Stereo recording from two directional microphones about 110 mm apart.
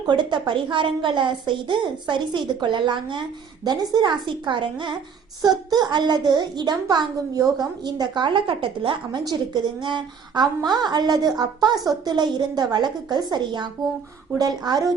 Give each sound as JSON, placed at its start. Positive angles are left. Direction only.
{"t": 0.0, "sound": "a woman's voice", "side_deg": -45}
{"t": 9.2, "sound": "a woman's voice", "side_deg": -40}